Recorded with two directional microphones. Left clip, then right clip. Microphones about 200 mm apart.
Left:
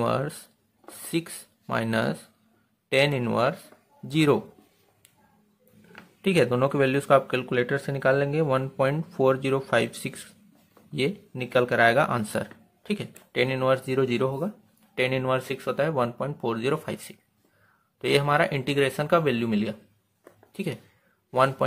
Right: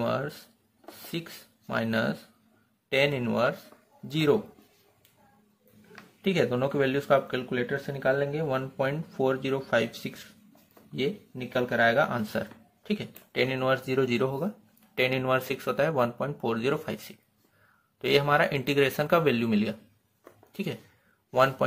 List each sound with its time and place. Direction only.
0.0 s speech: 25° left (ahead or behind)
6.2 s speech: 25° left (ahead or behind)